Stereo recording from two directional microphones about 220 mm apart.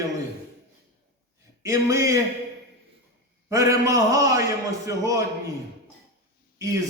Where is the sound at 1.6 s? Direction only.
15° right (ahead or behind).